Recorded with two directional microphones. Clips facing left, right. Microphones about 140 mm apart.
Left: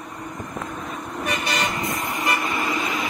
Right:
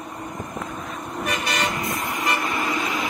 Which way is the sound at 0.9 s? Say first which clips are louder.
Even; centre (ahead or behind).